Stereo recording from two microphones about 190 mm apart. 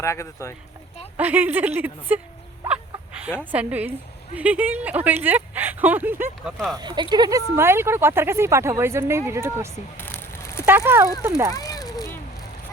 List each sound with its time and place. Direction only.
0.0 s speech: 15° left (ahead or behind)
1.1 s speech: 10° right (ahead or behind)
3.5 s speech: 10° right (ahead or behind)
6.7 s speech: 25° right (ahead or behind)
10.0 s a sound: 10° left (ahead or behind)
10.7 s speech: 10° right (ahead or behind)
11.5 s a sound: 20° left (ahead or behind)